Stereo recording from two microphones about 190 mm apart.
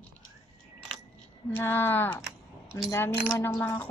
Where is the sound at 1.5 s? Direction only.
10° left (ahead or behind).